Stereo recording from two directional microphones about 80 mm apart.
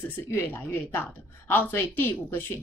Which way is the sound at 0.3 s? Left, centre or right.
Left.